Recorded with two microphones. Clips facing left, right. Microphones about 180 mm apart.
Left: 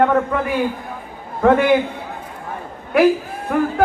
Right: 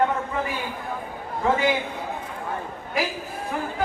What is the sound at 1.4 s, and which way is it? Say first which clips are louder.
Speech: left 9 dB; 60° left (ahead or behind).